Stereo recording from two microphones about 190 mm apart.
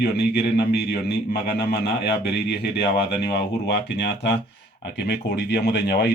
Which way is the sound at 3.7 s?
60° left (ahead or behind).